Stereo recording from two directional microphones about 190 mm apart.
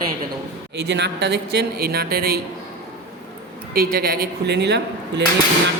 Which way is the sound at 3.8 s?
55° right (ahead or behind).